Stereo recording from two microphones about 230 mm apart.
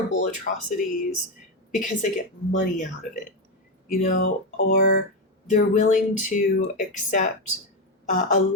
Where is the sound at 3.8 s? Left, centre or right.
Left.